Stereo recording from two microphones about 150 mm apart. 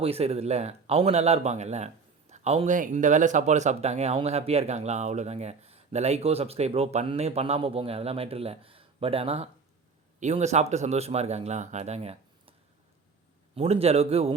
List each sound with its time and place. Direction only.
0.0 s speech: 40° right (ahead or behind)
2.7 s speech: 60° right (ahead or behind); by 12.5 s 45° right (ahead or behind)
13.6 s speech: 45° right (ahead or behind)